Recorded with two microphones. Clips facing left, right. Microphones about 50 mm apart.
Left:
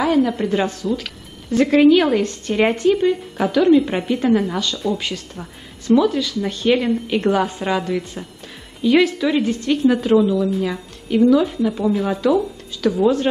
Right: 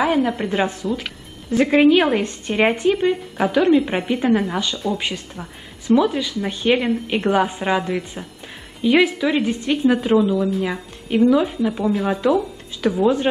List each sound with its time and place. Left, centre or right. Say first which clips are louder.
0.0 s a woman's voice: left 1 dB; centre